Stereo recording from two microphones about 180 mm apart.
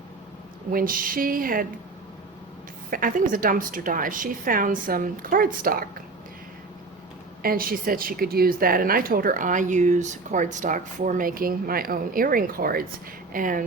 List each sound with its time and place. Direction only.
0.7 s a woman's voice: 50° right (ahead or behind)
2.9 s a woman's voice: 50° right (ahead or behind)
7.4 s a woman's voice: 55° right (ahead or behind)